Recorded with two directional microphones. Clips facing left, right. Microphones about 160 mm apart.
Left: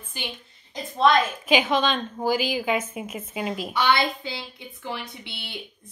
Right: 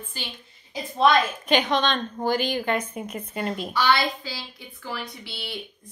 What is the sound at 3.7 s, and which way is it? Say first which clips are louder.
Speech: even; 20° left (ahead or behind).